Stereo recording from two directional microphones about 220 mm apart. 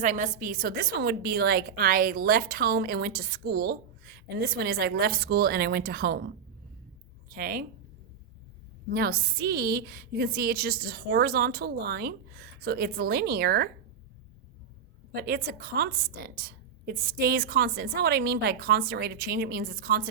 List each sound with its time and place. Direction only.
0.0 s a woman's voice: 35° right (ahead or behind)
8.9 s a woman's voice: 45° right (ahead or behind)
15.1 s a woman's voice: 45° right (ahead or behind)